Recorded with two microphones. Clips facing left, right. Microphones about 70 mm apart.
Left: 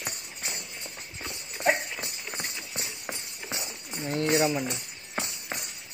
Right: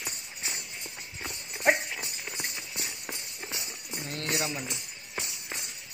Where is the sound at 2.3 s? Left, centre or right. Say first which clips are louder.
Left 1 dB; left.